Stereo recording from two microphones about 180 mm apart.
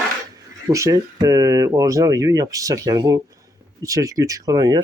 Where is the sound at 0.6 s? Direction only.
20° right (ahead or behind).